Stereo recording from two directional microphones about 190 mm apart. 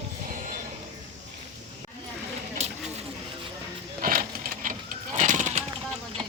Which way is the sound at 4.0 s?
50° right (ahead or behind).